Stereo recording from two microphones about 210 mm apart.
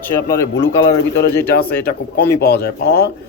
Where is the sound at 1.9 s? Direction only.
50° left (ahead or behind).